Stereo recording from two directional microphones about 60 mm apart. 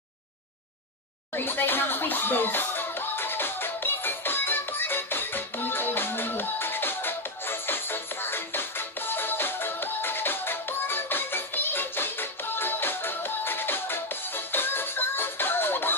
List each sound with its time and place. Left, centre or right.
1.3 s music: left